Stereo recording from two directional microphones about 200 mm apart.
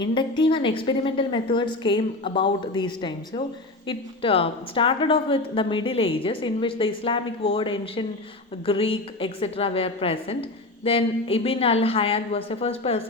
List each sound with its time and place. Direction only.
0.0 s a woman's voice: 25° left (ahead or behind)